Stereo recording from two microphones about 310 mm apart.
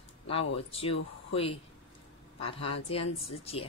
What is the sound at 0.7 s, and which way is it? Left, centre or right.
Speech, centre.